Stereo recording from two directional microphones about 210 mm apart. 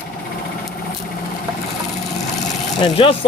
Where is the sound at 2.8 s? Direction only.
25° left (ahead or behind).